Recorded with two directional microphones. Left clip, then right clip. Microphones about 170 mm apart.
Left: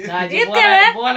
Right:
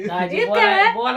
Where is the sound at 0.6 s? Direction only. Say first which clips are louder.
Left 5 dB; 30° left (ahead or behind).